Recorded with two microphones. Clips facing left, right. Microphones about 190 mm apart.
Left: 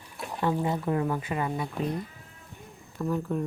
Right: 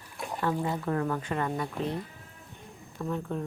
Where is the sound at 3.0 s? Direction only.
Centre (ahead or behind).